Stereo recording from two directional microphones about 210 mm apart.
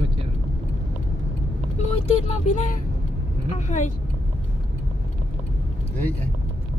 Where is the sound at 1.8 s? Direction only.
30° left (ahead or behind).